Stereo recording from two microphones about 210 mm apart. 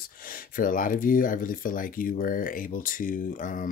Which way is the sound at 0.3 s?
40° left (ahead or behind).